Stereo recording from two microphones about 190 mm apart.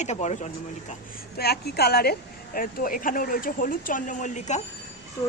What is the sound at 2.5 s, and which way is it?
Speech, 45° left (ahead or behind).